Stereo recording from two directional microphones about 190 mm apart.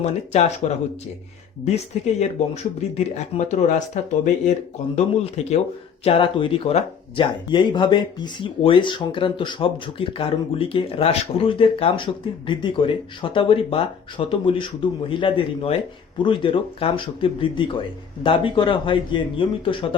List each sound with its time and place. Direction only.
0.6 s speech: 40° left (ahead or behind)